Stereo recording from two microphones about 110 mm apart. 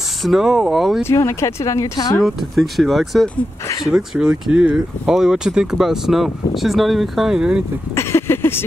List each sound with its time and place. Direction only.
0.2 s speech: 5° right (ahead or behind)
1.0 s speech: 25° left (ahead or behind)
2.2 s speech: centre (ahead or behind)
7.9 s a sound: 25° left (ahead or behind)